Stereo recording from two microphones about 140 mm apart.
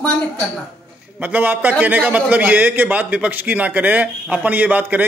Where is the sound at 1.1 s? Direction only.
10° right (ahead or behind).